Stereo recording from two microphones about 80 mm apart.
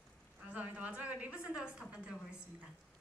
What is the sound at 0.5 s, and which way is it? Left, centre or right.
A woman's voice, centre.